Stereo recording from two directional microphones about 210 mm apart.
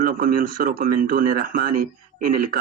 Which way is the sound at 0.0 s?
40° right (ahead or behind).